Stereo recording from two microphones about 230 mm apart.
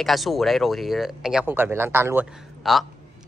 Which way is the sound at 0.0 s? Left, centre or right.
Centre.